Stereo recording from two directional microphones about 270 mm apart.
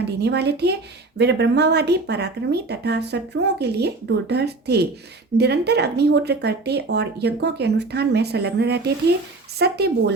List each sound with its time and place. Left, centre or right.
0.2 s speech: right